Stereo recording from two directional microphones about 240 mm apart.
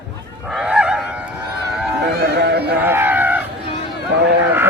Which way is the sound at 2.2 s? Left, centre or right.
Right.